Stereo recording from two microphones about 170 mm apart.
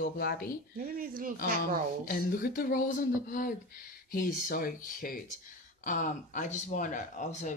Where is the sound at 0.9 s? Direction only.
60° right (ahead or behind).